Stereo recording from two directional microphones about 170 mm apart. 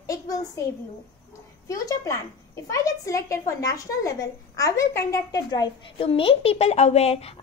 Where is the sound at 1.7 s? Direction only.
20° left (ahead or behind).